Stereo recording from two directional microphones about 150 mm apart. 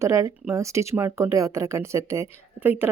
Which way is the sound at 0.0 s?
20° right (ahead or behind).